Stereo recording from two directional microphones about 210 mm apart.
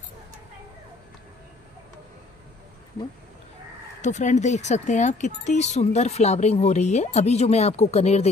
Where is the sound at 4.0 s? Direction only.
35° left (ahead or behind).